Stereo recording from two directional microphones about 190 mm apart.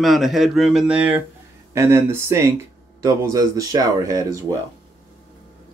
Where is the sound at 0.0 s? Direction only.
Centre (ahead or behind); by 4.6 s 15° right (ahead or behind).